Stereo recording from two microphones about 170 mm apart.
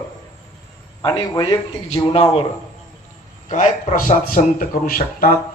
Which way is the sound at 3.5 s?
45° left (ahead or behind).